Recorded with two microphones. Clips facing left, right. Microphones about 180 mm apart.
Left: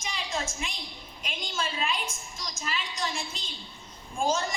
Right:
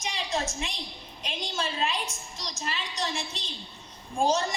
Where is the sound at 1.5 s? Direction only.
35° right (ahead or behind).